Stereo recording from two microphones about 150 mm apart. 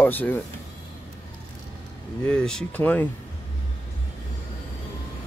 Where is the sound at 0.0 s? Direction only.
10° left (ahead or behind).